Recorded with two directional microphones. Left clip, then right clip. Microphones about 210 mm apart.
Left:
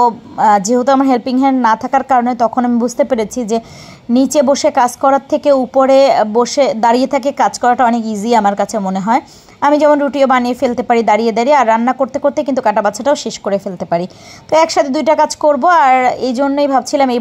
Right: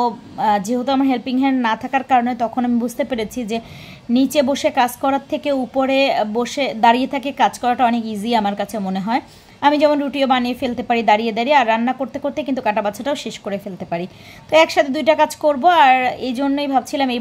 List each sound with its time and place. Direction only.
0.0 s a woman's voice: 25° left (ahead or behind)